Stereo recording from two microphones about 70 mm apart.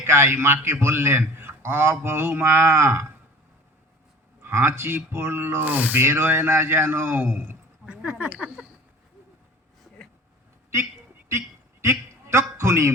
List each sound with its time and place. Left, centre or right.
0.0 s a man's voice: right
4.4 s a man's voice: right
5.6 s a man's voice: right
7.9 s speech: centre
11.3 s a sound: right